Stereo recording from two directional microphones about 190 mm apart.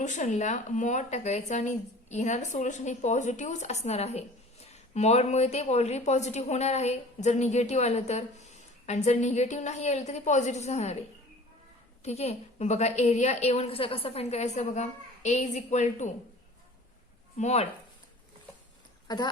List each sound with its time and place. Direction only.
0.0 s speech: 40° left (ahead or behind)
12.0 s speech: 35° left (ahead or behind)
17.3 s speech: 35° left (ahead or behind)
19.0 s speech: 20° left (ahead or behind)